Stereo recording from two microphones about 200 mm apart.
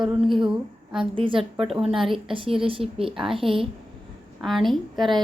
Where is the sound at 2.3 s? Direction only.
25° right (ahead or behind).